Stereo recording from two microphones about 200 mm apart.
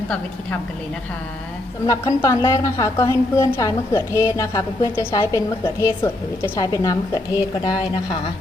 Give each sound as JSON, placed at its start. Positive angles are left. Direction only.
{"t": 1.9, "sound": "a woman's voice", "side_deg": 15}